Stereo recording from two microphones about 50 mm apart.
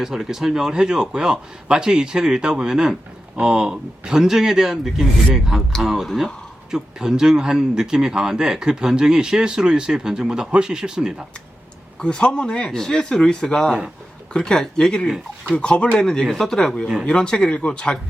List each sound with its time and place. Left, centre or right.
0.0 s speech: centre
6.7 s speech: centre
11.9 s speech: centre